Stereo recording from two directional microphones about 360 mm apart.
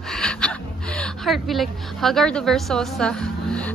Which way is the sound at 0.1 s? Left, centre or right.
Centre.